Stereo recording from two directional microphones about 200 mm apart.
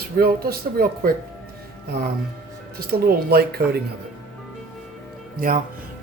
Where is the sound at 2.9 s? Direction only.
50° right (ahead or behind).